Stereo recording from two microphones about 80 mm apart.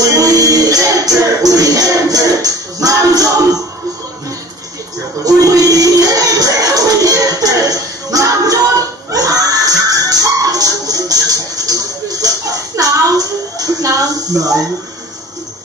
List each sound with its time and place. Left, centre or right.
0.1 s music: right
5.2 s music: right
13.6 s speech: right